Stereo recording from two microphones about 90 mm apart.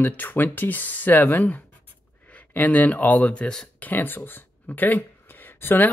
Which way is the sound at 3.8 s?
20° left (ahead or behind).